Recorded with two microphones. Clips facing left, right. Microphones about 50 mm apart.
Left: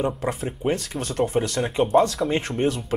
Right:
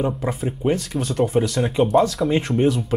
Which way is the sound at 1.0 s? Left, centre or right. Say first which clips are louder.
Right 3 dB; left.